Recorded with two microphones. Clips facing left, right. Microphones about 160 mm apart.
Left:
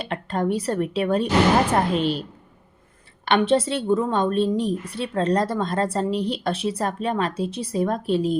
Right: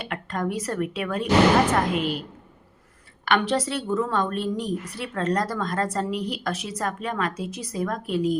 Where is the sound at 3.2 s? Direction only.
25° left (ahead or behind).